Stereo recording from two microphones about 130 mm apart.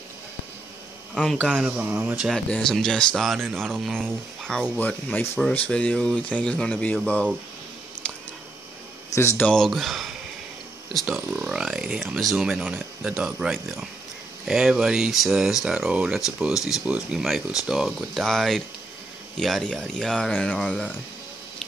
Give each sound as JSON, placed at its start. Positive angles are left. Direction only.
{"t": 1.1, "sound": "speech", "side_deg": 0}
{"t": 1.7, "sound": "speech", "side_deg": -15}
{"t": 2.2, "sound": "speech", "side_deg": 5}
{"t": 8.0, "sound": "a sound", "side_deg": 5}
{"t": 9.1, "sound": "speech", "side_deg": 20}
{"t": 9.4, "sound": "speech", "side_deg": 5}